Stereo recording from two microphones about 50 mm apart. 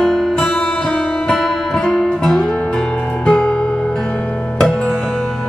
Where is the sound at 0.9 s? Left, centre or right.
Left.